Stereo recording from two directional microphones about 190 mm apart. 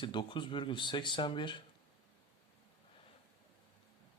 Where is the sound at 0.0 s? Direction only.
25° left (ahead or behind).